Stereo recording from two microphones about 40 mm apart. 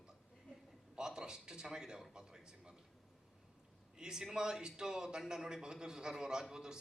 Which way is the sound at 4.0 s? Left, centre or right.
Centre.